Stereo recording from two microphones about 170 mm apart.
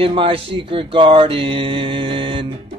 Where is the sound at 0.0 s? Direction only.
35° right (ahead or behind).